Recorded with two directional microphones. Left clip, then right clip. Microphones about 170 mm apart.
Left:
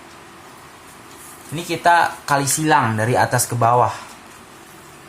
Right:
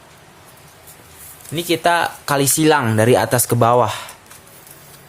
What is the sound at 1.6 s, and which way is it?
Speech, 50° right (ahead or behind).